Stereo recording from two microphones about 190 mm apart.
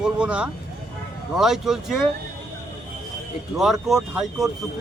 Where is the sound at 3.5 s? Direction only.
Centre (ahead or behind).